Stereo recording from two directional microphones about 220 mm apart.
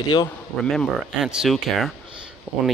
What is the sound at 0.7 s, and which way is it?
Speech, centre (ahead or behind).